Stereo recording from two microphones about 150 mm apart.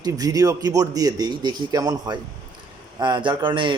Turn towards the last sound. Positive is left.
turn(degrees=-30)  # may be behind; listen again after turning